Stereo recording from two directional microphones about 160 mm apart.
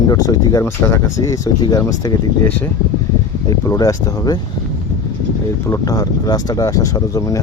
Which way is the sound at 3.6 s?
20° left (ahead or behind).